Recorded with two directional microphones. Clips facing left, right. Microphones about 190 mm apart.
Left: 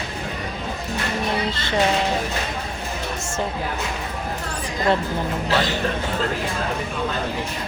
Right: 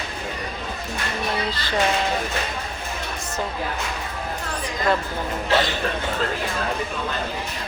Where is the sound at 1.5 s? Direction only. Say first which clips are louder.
Left 2 dB; 25° left (ahead or behind).